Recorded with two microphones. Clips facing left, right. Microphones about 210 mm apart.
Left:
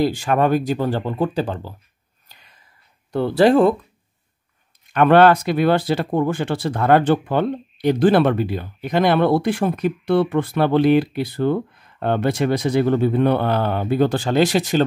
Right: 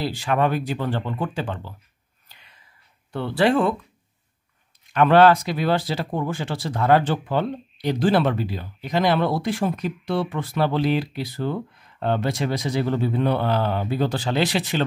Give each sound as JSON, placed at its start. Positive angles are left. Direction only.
{"t": 0.0, "sound": "speech", "side_deg": 50}
{"t": 2.2, "sound": "whispering", "side_deg": 40}
{"t": 3.1, "sound": "speech", "side_deg": 40}
{"t": 4.9, "sound": "speech", "side_deg": 55}